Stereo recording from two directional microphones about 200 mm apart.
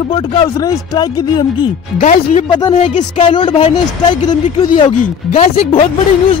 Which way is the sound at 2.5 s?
20° left (ahead or behind).